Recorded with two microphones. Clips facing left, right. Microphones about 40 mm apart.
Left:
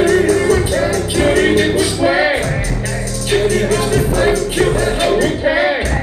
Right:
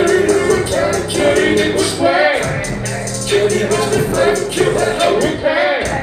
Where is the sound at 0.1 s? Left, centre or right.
Centre.